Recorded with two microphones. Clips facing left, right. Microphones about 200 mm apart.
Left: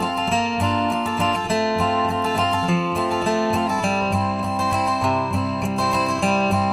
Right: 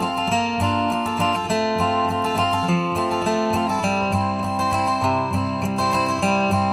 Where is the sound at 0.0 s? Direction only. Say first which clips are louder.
Even; centre (ahead or behind).